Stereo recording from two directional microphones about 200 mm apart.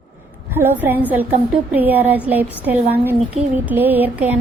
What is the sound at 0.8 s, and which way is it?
A woman's voice, 10° right (ahead or behind).